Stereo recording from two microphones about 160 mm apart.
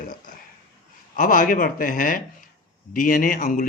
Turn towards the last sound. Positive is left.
turn(degrees=55)  # may be behind; listen again after turning